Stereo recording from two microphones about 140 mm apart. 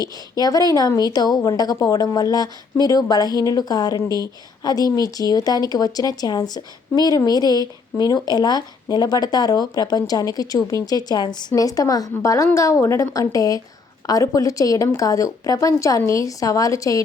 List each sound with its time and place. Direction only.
0.0 s a woman's voice: 30° left (ahead or behind)